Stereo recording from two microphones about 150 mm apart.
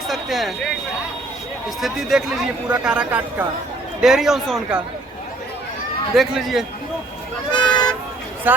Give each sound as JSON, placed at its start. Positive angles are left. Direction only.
{"t": 0.1, "sound": "speech", "side_deg": 0}
{"t": 1.8, "sound": "a man's voice", "side_deg": 0}
{"t": 6.1, "sound": "a man's voice", "side_deg": 0}
{"t": 7.5, "sound": "speech", "side_deg": 30}
{"t": 8.5, "sound": "a man's voice", "side_deg": -10}